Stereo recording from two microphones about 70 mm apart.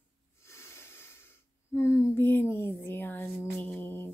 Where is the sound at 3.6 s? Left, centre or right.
Left.